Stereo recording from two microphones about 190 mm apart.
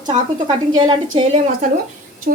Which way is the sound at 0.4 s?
25° right (ahead or behind).